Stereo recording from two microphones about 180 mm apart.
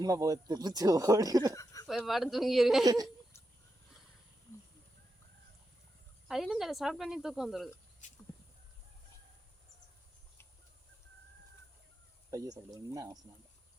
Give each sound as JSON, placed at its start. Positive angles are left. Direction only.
{"t": 0.0, "sound": "speech", "side_deg": -20}
{"t": 1.5, "sound": "a sound", "side_deg": 20}
{"t": 2.0, "sound": "speech", "side_deg": 0}
{"t": 2.8, "sound": "speech", "side_deg": -20}
{"t": 6.2, "sound": "speech", "side_deg": 0}
{"t": 8.0, "sound": "speech", "side_deg": 45}
{"t": 12.3, "sound": "speech", "side_deg": -20}